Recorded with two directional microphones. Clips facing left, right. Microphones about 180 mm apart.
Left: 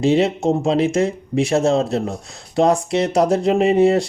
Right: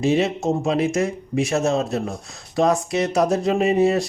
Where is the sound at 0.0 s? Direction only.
30° left (ahead or behind).